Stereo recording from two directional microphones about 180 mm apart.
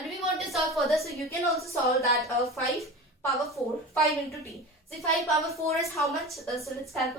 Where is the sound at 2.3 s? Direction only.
15° left (ahead or behind).